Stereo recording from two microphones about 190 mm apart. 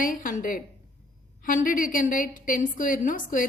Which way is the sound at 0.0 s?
45° left (ahead or behind).